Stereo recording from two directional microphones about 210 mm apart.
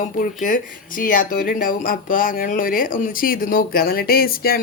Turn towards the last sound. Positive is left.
turn(degrees=45)  # may be behind; listen again after turning